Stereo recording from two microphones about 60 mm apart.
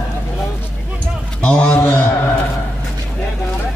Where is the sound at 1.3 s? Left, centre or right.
Centre.